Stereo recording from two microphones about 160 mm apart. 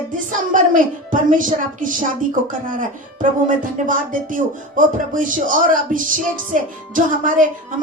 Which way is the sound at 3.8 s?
55° right (ahead or behind).